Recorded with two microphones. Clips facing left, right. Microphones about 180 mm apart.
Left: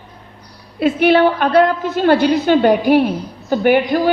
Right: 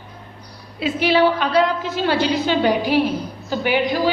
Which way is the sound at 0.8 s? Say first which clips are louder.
Left 5 dB; 55° left (ahead or behind).